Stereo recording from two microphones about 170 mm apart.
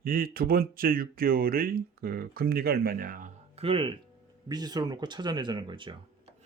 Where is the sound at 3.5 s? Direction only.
35° right (ahead or behind).